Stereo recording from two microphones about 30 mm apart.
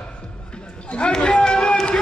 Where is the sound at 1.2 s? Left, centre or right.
Left.